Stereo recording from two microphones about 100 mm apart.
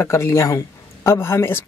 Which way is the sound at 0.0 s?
25° left (ahead or behind).